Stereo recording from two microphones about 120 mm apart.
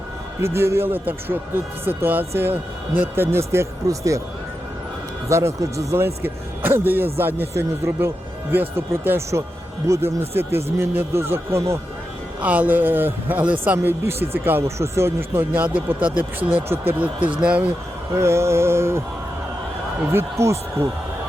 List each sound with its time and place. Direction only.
0.4 s a man's voice: 20° right (ahead or behind)
5.3 s a man's voice: 25° right (ahead or behind)
18.1 s a man's voice: 20° right (ahead or behind)
20.1 s a man's voice: 25° right (ahead or behind)